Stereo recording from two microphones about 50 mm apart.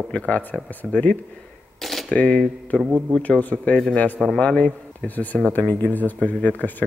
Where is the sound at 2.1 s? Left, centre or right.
Left.